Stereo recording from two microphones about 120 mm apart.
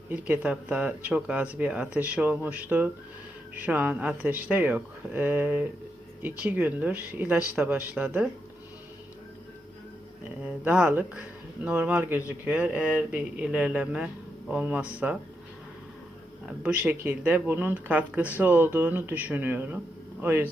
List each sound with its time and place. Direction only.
0.1 s speech: 10° right (ahead or behind)
10.4 s speech: 10° right (ahead or behind)
16.6 s speech: 15° right (ahead or behind)